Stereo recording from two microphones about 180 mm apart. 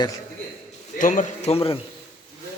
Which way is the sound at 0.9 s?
45° left (ahead or behind).